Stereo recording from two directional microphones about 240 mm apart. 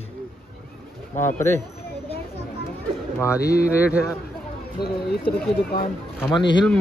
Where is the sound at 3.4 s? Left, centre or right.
Left.